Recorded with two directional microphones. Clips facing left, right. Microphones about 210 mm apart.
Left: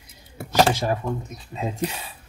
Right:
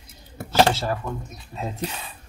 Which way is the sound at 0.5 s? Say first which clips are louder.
Even; 15° left (ahead or behind).